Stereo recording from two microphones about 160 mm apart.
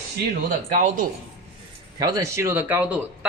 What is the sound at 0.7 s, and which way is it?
Speech, 55° right (ahead or behind).